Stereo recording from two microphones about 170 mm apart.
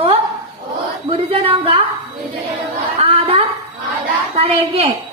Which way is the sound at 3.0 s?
35° right (ahead or behind).